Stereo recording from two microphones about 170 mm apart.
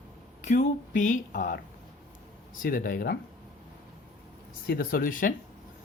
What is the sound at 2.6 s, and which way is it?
Speech, 60° left (ahead or behind).